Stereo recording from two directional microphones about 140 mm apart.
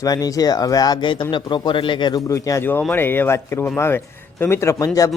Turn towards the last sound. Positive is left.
turn(degrees=25)  # may be behind; listen again after turning